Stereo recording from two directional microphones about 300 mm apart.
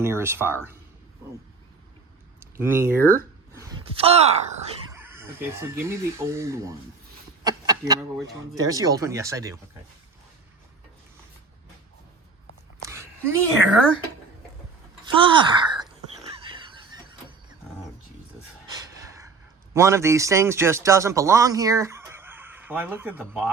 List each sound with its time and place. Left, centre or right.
0.0 s speech: centre
2.6 s speech: centre
4.9 s speech: centre
12.9 s a sound: centre
15.0 s speech: centre
16.5 s squeal: centre
18.7 s gasp: centre
19.7 s speech: centre